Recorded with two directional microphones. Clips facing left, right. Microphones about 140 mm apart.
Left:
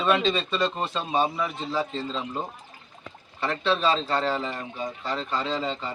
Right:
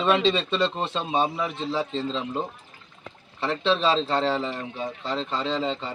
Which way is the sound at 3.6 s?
25° right (ahead or behind).